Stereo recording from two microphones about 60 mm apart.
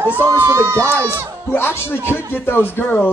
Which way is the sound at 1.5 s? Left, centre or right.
Left.